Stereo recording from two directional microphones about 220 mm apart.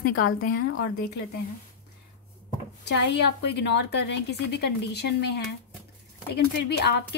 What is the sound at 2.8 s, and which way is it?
A woman's voice, 50° left (ahead or behind).